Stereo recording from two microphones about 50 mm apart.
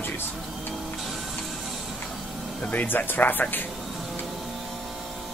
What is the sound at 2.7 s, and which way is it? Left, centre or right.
Speech, left.